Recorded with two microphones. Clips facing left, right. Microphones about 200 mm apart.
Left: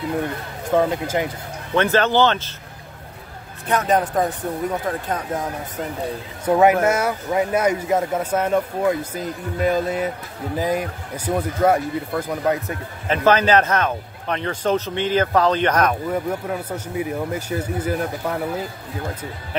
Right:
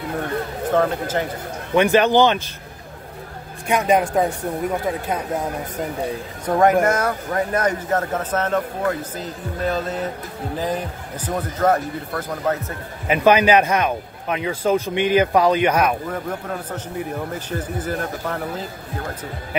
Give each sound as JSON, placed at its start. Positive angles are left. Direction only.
{"t": 0.7, "sound": "speech", "side_deg": 10}
{"t": 1.8, "sound": "speech", "side_deg": -15}
{"t": 3.6, "sound": "speech", "side_deg": -10}
{"t": 6.4, "sound": "speech", "side_deg": 10}
{"t": 13.1, "sound": "speech", "side_deg": -10}
{"t": 16.1, "sound": "speech", "side_deg": 10}